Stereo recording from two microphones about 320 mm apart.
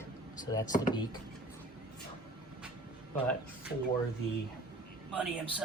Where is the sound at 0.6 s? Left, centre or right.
Left.